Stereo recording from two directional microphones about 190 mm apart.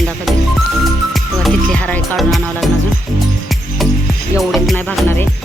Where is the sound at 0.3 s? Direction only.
Centre (ahead or behind).